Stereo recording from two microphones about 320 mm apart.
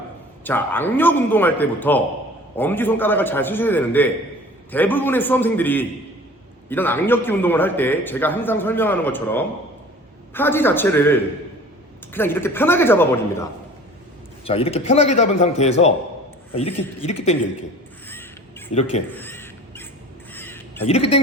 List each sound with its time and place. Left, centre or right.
0.4 s a man's voice: centre
14.4 s a man's voice: centre
18.7 s a man's voice: centre
19.1 s crow: centre